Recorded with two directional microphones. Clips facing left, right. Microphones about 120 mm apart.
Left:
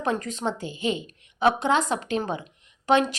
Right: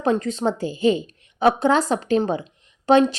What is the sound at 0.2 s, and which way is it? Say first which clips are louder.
A woman's voice: right 6 dB; 30° right (ahead or behind).